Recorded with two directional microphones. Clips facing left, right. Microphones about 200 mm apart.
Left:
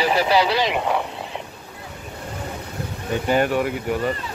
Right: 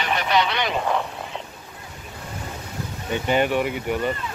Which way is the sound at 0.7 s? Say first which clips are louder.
Left 1 dB; 10° left (ahead or behind).